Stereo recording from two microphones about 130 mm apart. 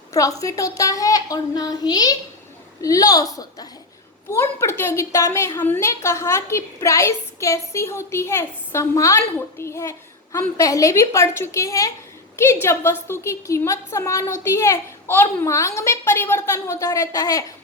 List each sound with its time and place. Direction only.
0.1 s a woman's voice: 25° left (ahead or behind)